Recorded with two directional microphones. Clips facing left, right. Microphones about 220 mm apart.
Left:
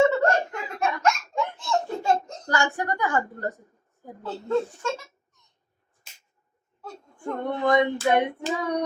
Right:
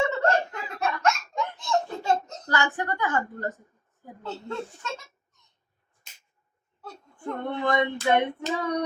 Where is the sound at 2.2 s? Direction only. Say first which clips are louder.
Left 2 dB; 10° left (ahead or behind).